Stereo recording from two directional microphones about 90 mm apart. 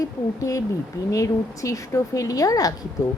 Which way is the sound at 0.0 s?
40° left (ahead or behind).